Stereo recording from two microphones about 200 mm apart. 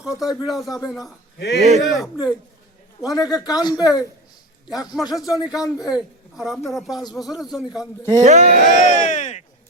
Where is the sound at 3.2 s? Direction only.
20° left (ahead or behind).